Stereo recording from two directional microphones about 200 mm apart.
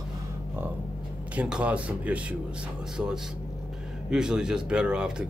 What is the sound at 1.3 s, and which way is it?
Speech, 5° right (ahead or behind).